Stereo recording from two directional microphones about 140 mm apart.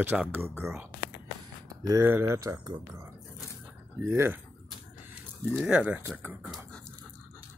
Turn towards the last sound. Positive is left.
turn(degrees=-15)  # may be behind; listen again after turning